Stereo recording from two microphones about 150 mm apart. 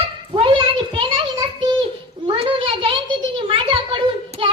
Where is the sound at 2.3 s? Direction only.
35° right (ahead or behind).